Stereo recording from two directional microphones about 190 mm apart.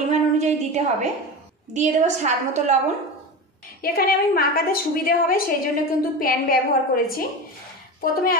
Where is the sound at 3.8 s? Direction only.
50° left (ahead or behind).